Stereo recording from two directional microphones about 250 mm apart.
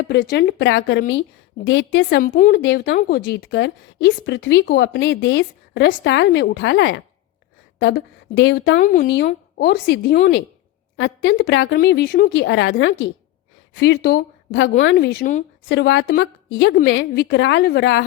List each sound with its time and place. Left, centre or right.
0.1 s a woman's voice: left
8.8 s a woman's voice: left